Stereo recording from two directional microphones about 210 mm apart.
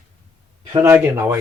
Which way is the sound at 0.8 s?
10° right (ahead or behind).